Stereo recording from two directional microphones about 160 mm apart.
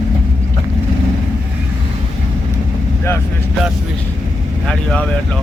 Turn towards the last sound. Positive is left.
turn(degrees=5)  # may be behind; listen again after turning